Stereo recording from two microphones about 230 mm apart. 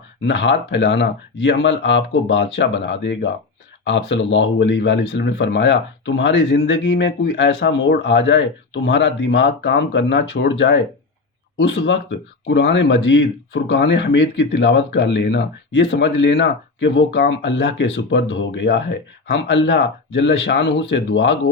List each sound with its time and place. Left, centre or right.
0.3 s speech: left